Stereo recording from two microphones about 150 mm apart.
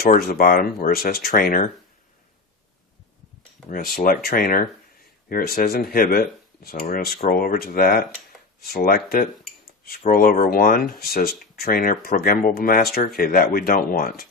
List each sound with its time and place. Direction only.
0.0 s speech: 90° left; by 1.6 s 75° left (ahead or behind)
3.7 s speech: 75° left (ahead or behind)
8.6 s speech: 85° left